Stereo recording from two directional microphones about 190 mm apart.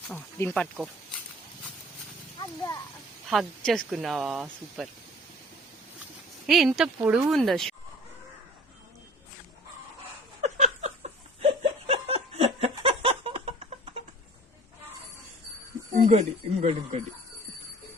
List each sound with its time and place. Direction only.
0.1 s speech: 10° left (ahead or behind)
3.2 s speech: centre (ahead or behind)
6.5 s speech: centre (ahead or behind)
10.4 s laughter: 35° right (ahead or behind)
12.7 s chicken: 30° right (ahead or behind)
16.0 s speech: 40° right (ahead or behind)